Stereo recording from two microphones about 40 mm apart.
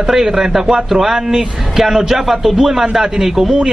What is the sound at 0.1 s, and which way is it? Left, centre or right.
A man's voice, centre.